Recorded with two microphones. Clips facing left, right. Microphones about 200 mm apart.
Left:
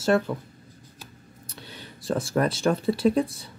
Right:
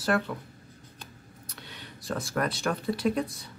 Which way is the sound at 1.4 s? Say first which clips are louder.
Left 3 dB; 30° left (ahead or behind).